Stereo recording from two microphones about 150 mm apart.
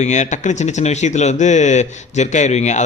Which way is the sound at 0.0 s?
50° left (ahead or behind).